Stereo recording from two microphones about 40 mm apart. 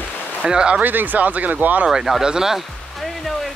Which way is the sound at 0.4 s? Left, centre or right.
Right.